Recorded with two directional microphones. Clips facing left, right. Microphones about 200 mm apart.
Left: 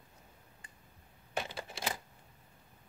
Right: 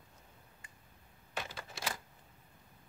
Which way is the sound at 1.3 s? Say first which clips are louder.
Left 5 dB; 30° left (ahead or behind).